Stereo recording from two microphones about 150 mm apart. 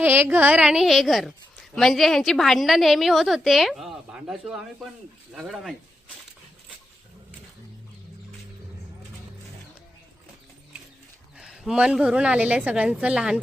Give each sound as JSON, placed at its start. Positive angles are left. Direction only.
{"t": 0.0, "sound": "a woman's voice", "side_deg": -15}
{"t": 11.3, "sound": "a woman's voice", "side_deg": -5}